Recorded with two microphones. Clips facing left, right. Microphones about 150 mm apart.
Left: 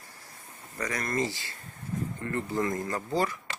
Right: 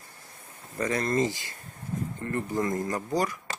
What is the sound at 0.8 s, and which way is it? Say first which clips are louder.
Speech: right 5 dB; 25° right (ahead or behind).